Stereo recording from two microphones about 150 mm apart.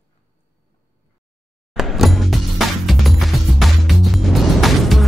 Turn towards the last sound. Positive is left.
turn(degrees=0)  # may be behind; listen again after turning